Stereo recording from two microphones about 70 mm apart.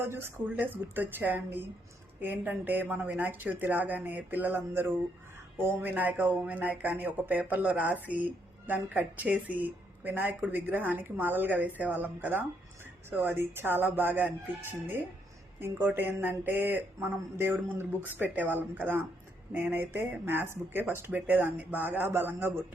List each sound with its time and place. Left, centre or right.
0.0 s speech: right
0.6 s speech: right